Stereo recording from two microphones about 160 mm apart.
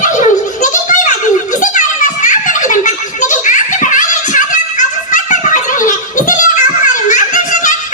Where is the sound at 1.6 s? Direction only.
55° left (ahead or behind).